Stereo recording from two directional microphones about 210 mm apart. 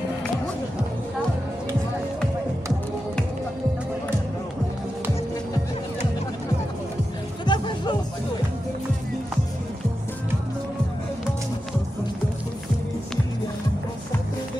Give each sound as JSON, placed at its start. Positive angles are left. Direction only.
{"t": 7.4, "sound": "music", "side_deg": 20}